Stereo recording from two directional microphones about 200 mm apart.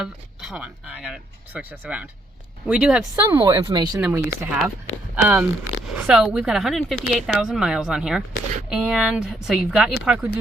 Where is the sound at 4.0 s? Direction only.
10° right (ahead or behind).